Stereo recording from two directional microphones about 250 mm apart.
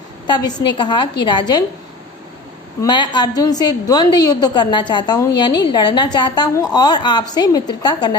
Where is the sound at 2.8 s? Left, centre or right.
Centre.